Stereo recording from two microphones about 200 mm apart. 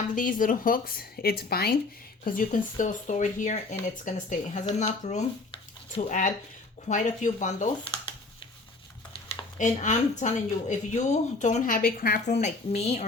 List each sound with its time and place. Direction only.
0.1 s speech: 40° left (ahead or behind)
9.6 s speech: 40° left (ahead or behind)